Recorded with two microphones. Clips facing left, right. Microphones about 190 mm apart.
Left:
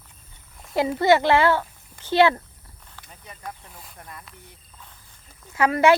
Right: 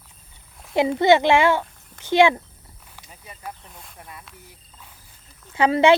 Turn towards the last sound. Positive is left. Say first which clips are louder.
# right 2 dB
turn(degrees=-25)  # may be behind; listen again after turning